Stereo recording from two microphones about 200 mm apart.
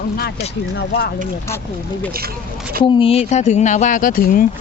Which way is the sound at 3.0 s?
30° left (ahead or behind).